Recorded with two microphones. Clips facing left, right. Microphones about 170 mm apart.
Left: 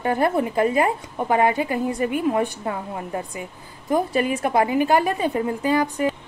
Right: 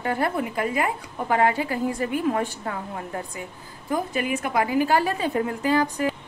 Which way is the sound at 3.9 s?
30° left (ahead or behind).